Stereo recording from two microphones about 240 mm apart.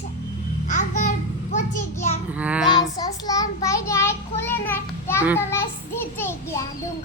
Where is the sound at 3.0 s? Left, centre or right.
Centre.